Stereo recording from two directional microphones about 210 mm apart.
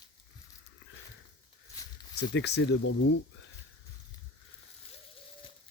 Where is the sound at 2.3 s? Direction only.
55° left (ahead or behind).